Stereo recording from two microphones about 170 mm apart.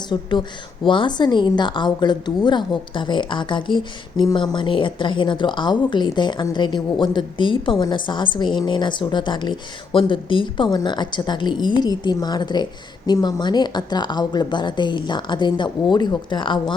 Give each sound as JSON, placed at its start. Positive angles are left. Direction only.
{"t": 0.1, "sound": "a woman's voice", "side_deg": 25}